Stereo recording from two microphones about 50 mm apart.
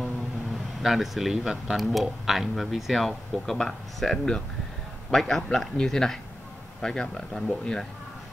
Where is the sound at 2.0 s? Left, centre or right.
Centre.